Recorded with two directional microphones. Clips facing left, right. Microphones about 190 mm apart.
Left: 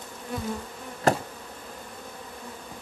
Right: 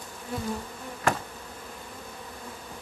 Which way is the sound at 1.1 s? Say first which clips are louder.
Left 4 dB; 40° left (ahead or behind).